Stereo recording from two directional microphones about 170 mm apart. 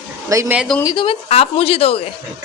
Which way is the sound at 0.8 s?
25° left (ahead or behind).